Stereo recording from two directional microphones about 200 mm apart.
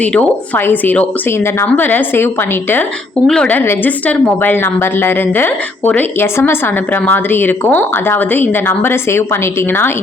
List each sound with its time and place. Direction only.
0.0 s a woman's voice: 5° left (ahead or behind)